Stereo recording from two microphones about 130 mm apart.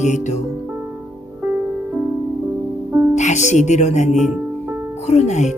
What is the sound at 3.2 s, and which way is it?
Speech, 65° left (ahead or behind).